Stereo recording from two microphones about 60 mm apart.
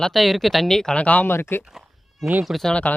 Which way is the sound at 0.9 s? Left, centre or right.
Left.